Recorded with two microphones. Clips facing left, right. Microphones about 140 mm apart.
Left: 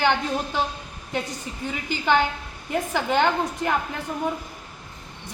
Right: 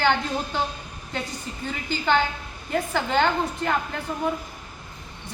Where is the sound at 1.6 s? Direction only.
15° left (ahead or behind).